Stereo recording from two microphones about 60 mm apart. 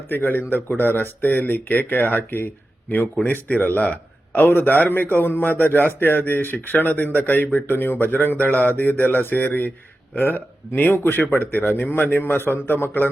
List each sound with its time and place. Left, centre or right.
0.1 s a man's voice: left
3.8 s a man's voice: left